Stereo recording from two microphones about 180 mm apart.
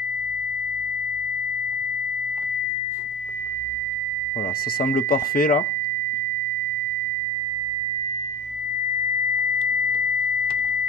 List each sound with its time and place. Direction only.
4.7 s speech: 55° left (ahead or behind)